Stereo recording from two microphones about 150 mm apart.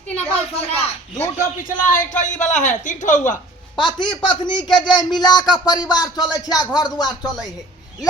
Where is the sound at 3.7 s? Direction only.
30° left (ahead or behind).